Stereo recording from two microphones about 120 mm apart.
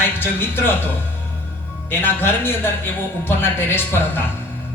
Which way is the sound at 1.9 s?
20° left (ahead or behind).